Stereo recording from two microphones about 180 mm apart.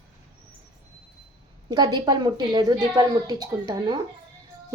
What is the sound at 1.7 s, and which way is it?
A child's voice, 20° right (ahead or behind).